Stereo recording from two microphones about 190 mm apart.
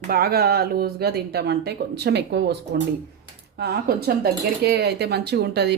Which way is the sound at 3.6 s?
55° right (ahead or behind).